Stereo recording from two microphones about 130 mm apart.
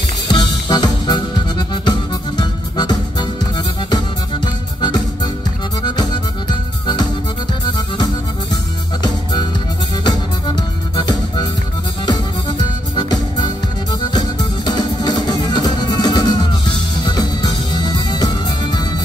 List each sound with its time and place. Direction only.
0.3 s music: 30° left (ahead or behind)
5.8 s music: 35° left (ahead or behind)
9.0 s music: 35° left (ahead or behind)